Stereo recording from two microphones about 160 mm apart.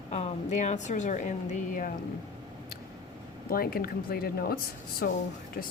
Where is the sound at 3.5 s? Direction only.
65° left (ahead or behind).